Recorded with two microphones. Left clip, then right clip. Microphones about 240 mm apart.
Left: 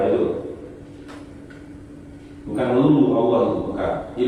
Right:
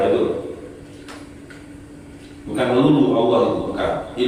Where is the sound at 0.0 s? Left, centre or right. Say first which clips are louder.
Right 2 dB; centre.